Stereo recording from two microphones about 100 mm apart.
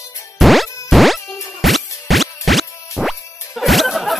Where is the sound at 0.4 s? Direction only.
Centre (ahead or behind).